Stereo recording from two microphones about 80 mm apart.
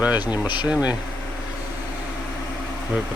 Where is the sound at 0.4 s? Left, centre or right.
Left.